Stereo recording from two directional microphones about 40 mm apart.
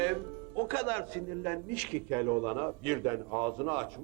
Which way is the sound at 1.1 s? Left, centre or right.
Left.